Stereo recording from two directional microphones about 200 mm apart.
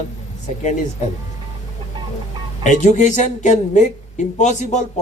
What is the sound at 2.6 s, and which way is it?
Speech, 35° left (ahead or behind).